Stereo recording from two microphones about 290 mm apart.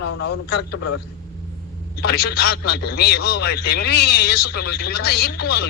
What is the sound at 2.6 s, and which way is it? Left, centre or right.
A man's voice, left.